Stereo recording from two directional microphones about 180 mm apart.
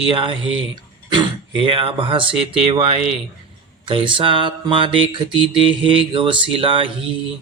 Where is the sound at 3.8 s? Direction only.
25° right (ahead or behind).